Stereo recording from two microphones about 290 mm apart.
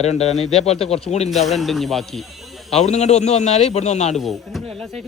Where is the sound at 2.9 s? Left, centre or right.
Left.